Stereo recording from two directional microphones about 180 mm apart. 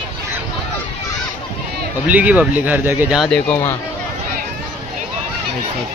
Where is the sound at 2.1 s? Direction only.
10° right (ahead or behind).